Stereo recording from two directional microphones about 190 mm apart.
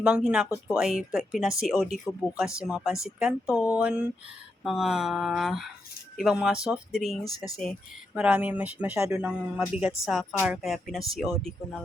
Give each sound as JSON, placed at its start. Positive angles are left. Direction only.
{"t": 0.0, "sound": "speech", "side_deg": -5}
{"t": 7.3, "sound": "speech", "side_deg": 20}
{"t": 7.5, "sound": "speech", "side_deg": 0}